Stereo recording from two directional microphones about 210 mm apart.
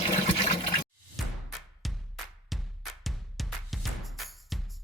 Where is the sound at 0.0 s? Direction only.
30° left (ahead or behind).